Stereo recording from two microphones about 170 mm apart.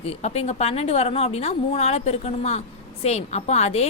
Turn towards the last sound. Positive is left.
turn(degrees=40)  # may be behind; listen again after turning